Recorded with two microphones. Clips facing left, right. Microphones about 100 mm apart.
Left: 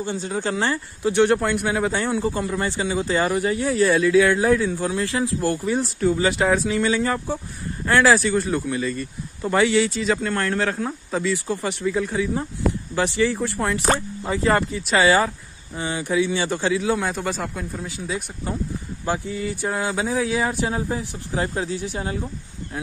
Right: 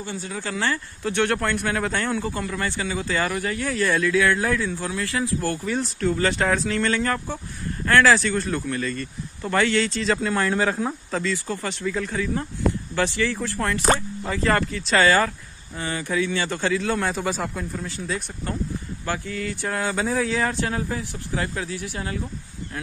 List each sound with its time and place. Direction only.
0.0 s speech: 25° left (ahead or behind); by 11.0 s 5° right (ahead or behind)
11.1 s speech: 10° left (ahead or behind)
11.3 s speech: 20° left (ahead or behind)
17.0 s speech: centre (ahead or behind)
20.7 s speech: 20° left (ahead or behind)